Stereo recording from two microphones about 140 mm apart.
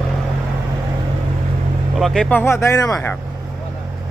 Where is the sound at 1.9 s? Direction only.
5° left (ahead or behind); by 3.0 s 25° left (ahead or behind).